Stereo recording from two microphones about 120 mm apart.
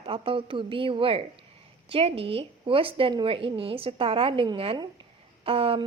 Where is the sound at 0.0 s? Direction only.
50° right (ahead or behind).